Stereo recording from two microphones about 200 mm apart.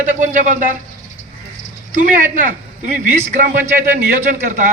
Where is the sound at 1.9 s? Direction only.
40° right (ahead or behind).